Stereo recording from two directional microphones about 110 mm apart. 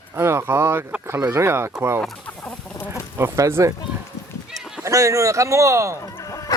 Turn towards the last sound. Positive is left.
turn(degrees=-25)  # may be behind; listen again after turning